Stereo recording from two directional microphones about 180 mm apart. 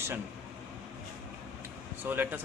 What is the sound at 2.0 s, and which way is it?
Speech, 10° right (ahead or behind).